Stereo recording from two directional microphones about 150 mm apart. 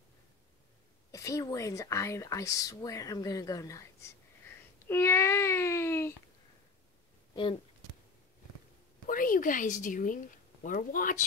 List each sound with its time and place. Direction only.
1.1 s speech: 20° left (ahead or behind)
4.5 s a sound: 15° left (ahead or behind)
4.8 s speech: 15° left (ahead or behind)
9.0 s a woman's voice: 65° left (ahead or behind)